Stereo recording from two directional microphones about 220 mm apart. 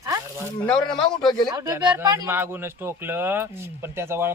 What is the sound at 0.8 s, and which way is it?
Speech, 20° left (ahead or behind).